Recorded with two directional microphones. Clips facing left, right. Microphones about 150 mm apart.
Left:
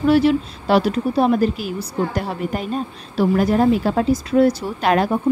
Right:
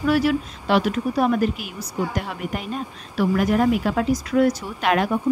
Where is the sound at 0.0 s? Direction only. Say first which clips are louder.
Left 5 dB; 25° left (ahead or behind).